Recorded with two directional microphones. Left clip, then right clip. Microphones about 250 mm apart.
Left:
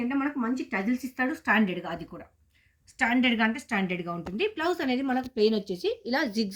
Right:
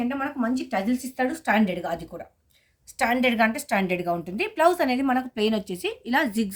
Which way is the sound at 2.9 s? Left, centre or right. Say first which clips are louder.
Right 3 dB; right.